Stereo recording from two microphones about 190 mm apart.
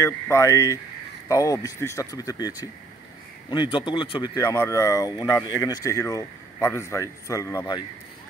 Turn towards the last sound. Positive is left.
turn(degrees=20)  # may be behind; listen again after turning